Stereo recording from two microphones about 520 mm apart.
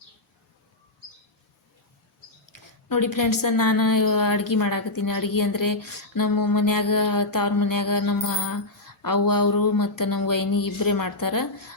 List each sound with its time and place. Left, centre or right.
2.5 s speech: left